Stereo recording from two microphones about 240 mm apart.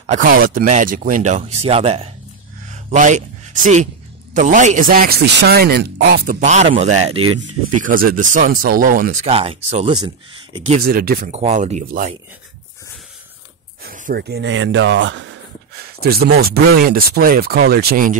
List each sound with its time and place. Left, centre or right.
0.0 s speech: right
6.4 s speech: right
7.2 s speech: right
7.7 s speech: right; by 10.8 s centre
10.8 s speech: right
13.8 s speech: right
16.0 s speech: right